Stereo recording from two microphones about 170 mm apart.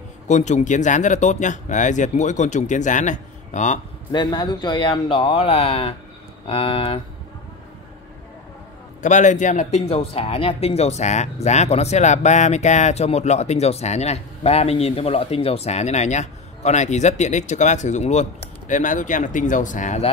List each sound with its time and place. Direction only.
0.3 s speech: 45° left (ahead or behind)
4.1 s speech: 25° left (ahead or behind)
9.0 s speech: 45° left (ahead or behind)